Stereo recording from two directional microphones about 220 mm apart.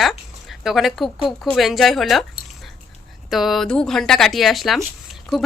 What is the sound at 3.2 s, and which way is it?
Speech, centre (ahead or behind).